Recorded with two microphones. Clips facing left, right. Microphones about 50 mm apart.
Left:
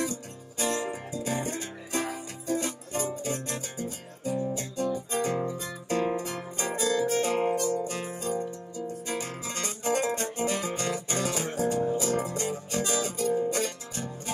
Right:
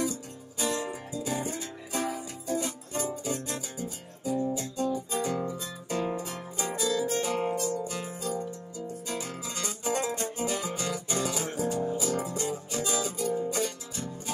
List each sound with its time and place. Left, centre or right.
0.0 s music: left
5.1 s guitar: left
5.5 s music: left